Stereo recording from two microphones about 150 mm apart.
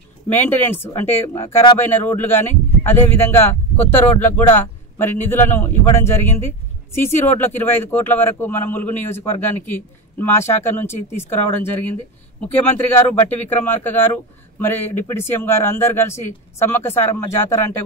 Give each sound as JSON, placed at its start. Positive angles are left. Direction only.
{"t": 0.3, "sound": "a man's voice", "side_deg": 15}